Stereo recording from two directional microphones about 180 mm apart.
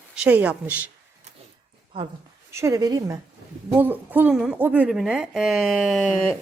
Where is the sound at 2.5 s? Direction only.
15° right (ahead or behind).